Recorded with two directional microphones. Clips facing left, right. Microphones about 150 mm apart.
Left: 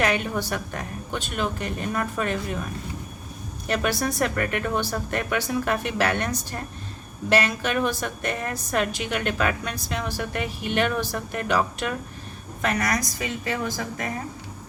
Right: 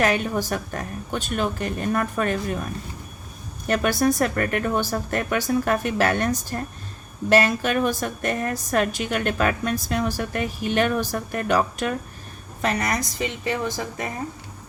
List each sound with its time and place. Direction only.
0.0 s a woman's voice: 40° right (ahead or behind)
3.7 s a woman's voice: 45° right (ahead or behind)
12.6 s speech: 25° right (ahead or behind)